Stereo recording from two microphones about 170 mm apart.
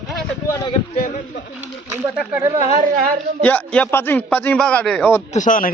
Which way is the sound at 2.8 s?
60° right (ahead or behind).